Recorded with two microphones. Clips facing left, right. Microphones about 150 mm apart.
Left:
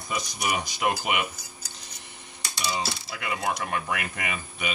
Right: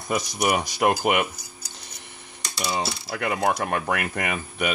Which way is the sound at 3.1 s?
50° right (ahead or behind).